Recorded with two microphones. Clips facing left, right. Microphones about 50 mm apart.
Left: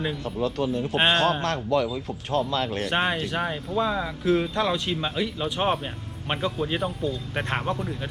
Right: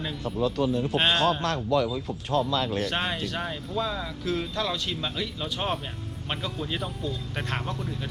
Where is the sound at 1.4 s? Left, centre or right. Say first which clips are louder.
Left 1 dB; left.